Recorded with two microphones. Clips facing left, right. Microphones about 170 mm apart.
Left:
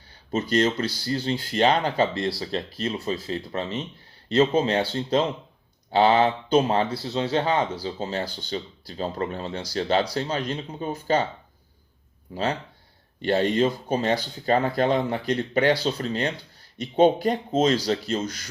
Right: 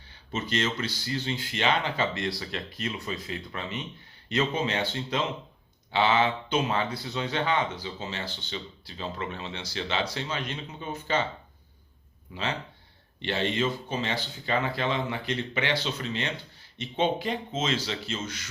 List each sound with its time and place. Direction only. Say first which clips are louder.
0.3 s speech: left 7 dB; 35° left (ahead or behind)
12.3 s speech: left 6 dB; 40° left (ahead or behind)